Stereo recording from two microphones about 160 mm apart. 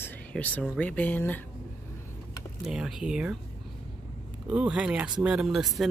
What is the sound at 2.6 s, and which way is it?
Speech, 5° right (ahead or behind).